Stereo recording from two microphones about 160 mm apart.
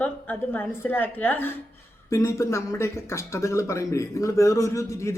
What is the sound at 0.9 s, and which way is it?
A woman's voice, 10° left (ahead or behind).